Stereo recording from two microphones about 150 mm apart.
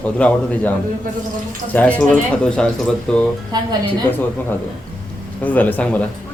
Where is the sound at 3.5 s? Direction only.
25° right (ahead or behind).